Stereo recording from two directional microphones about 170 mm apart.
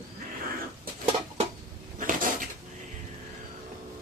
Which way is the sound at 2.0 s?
55° right (ahead or behind).